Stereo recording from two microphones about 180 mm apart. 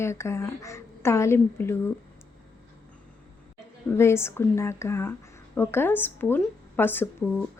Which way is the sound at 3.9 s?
15° left (ahead or behind).